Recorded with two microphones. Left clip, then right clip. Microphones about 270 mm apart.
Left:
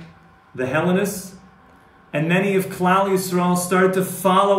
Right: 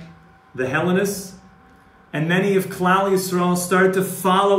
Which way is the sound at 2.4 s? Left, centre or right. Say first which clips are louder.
Right 1 dB; centre.